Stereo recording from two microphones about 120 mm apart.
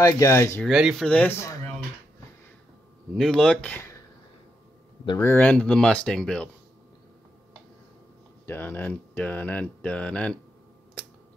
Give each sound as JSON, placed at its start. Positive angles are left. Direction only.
{"t": 0.0, "sound": "speech", "side_deg": 25}
{"t": 0.7, "sound": "speech", "side_deg": 0}
{"t": 1.0, "sound": "speech", "side_deg": 10}
{"t": 3.2, "sound": "speech", "side_deg": 5}
{"t": 5.2, "sound": "speech", "side_deg": 15}
{"t": 8.5, "sound": "speech", "side_deg": 15}